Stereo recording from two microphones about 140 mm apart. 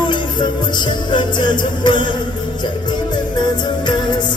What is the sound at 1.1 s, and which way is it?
Music, 35° left (ahead or behind).